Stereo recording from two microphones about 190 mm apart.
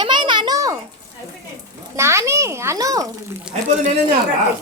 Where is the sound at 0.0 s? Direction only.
25° right (ahead or behind).